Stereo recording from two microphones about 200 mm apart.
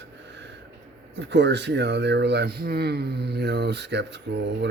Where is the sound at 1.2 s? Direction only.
60° right (ahead or behind).